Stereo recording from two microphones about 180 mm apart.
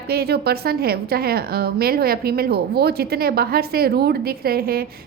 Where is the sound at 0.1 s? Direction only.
60° right (ahead or behind).